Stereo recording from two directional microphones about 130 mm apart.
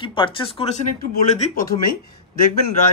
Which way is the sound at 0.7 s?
80° left.